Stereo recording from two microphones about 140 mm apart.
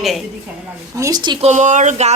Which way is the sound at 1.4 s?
60° right (ahead or behind).